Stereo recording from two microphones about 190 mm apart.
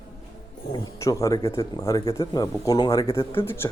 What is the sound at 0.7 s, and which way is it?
A man's voice, 20° left (ahead or behind).